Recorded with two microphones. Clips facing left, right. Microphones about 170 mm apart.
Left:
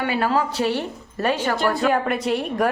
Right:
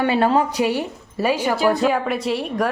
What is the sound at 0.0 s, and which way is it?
A woman's voice, 25° right (ahead or behind).